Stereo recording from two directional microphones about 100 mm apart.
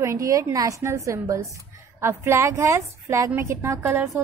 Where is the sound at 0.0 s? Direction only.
30° right (ahead or behind).